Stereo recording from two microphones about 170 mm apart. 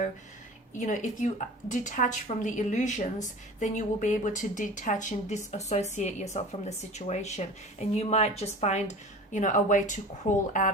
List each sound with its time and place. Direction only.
0.8 s a woman's voice: 45° left (ahead or behind)